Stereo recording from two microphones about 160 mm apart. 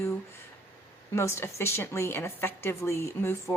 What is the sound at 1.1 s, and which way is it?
A woman's voice, 15° left (ahead or behind).